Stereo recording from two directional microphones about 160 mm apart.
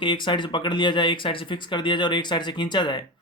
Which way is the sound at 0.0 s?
30° left (ahead or behind).